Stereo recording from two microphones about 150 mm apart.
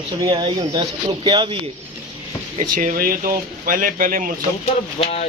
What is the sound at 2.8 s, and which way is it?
Speech, 65° right (ahead or behind).